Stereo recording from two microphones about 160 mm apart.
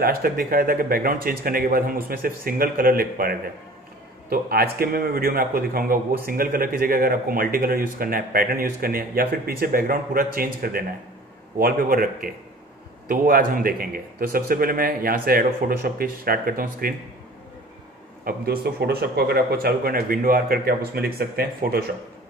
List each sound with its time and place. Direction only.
0.0 s a man's voice: 70° right (ahead or behind)
18.2 s a man's voice: 70° right (ahead or behind)